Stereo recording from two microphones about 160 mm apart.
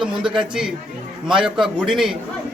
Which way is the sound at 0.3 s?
5° right (ahead or behind).